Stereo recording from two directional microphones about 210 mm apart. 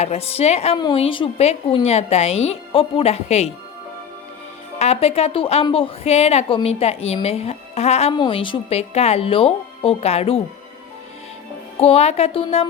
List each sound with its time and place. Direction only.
0.0 s a woman's voice: 30° left (ahead or behind)
4.8 s a woman's voice: 30° left (ahead or behind)
11.8 s a woman's voice: 30° left (ahead or behind)